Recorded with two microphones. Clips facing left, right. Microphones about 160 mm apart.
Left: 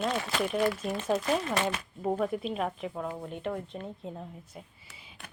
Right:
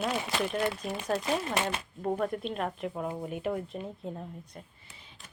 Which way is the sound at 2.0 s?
5° left (ahead or behind).